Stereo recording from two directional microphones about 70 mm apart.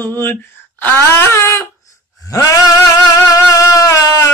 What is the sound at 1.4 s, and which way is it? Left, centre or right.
Male singing, left.